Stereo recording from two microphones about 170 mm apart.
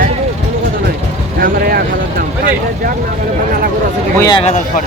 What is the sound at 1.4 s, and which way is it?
Vehicle, 60° right (ahead or behind).